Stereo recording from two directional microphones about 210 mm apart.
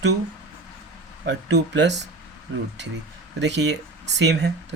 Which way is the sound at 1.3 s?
60° right (ahead or behind).